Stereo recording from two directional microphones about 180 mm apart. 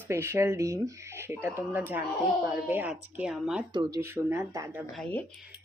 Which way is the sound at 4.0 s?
15° right (ahead or behind).